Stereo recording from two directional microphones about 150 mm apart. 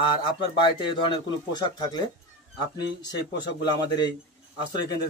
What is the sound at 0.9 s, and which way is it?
A man's voice, 35° left (ahead or behind).